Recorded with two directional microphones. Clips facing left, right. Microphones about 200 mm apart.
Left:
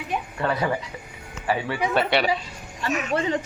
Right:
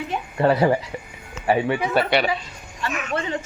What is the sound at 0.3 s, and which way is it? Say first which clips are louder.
Speech: right 8 dB; 30° right (ahead or behind).